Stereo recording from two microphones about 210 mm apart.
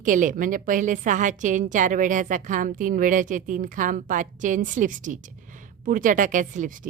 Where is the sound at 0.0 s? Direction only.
40° right (ahead or behind).